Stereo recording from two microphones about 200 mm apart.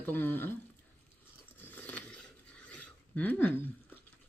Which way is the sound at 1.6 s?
10° left (ahead or behind).